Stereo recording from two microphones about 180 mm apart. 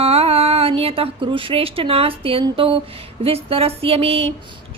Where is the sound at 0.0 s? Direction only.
35° right (ahead or behind).